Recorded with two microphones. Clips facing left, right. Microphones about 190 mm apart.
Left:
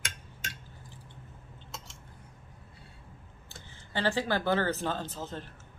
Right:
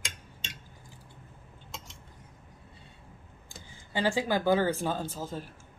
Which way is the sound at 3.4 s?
10° right (ahead or behind).